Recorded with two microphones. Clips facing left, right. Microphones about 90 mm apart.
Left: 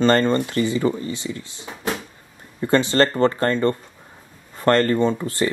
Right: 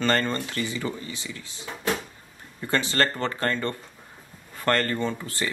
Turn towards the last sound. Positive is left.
turn(degrees=25)  # may be behind; listen again after turning